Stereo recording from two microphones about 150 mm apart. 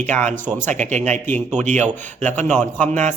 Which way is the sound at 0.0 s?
10° left (ahead or behind).